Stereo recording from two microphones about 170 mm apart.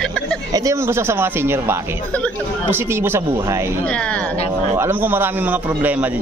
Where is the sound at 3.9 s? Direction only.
5° left (ahead or behind).